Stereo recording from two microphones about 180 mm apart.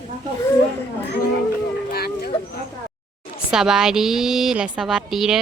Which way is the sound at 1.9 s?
60° left (ahead or behind).